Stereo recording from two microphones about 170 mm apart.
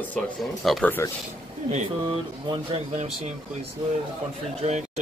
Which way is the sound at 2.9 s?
45° right (ahead or behind).